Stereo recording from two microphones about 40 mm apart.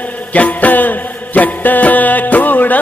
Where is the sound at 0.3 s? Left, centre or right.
Left.